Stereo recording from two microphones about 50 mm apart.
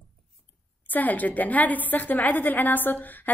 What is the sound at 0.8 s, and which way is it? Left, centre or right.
A woman's voice, left.